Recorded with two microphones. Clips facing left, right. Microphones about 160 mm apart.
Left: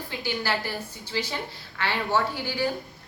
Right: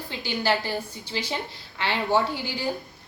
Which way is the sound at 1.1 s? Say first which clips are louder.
Even; 20° right (ahead or behind).